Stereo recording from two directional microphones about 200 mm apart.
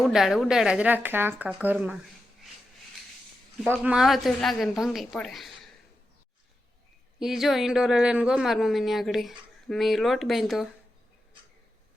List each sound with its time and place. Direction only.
0.0 s speech: centre (ahead or behind)
3.6 s speech: centre (ahead or behind)
7.2 s speech: centre (ahead or behind)